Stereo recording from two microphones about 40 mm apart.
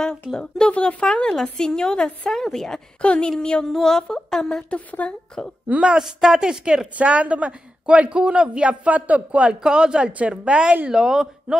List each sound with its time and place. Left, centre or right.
0.3 s speech: centre
0.7 s a woman's voice: left; by 2.8 s centre
3.0 s a woman's voice: left; by 4.6 s centre
4.6 s a woman's voice: left
5.4 s a woman's voice: centre
5.9 s speech: centre
7.0 s a man's voice: right
9.6 s speech: centre
10.9 s speech: centre